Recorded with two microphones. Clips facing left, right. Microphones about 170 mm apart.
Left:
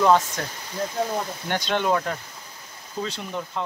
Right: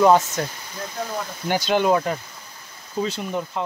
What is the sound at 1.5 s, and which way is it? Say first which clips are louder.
Speech: right 4 dB; 5° right (ahead or behind).